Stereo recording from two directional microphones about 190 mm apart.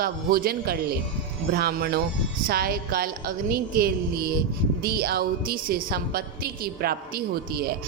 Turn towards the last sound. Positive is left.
turn(degrees=-55)  # may be behind; listen again after turning